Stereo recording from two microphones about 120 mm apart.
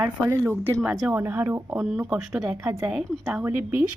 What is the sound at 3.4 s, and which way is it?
Speech, 15° right (ahead or behind).